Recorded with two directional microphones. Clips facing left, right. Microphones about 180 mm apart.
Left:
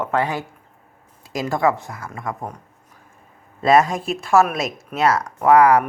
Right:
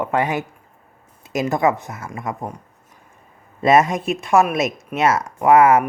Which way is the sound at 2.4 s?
10° right (ahead or behind).